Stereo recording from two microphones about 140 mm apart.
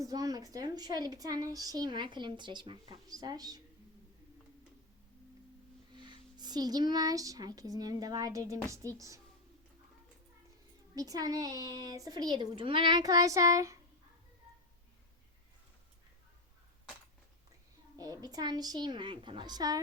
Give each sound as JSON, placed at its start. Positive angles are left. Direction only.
{"t": 0.0, "sound": "a woman's voice", "side_deg": -25}
{"t": 5.9, "sound": "speech", "side_deg": -30}
{"t": 10.9, "sound": "a woman's voice", "side_deg": -25}
{"t": 18.0, "sound": "a woman's voice", "side_deg": -25}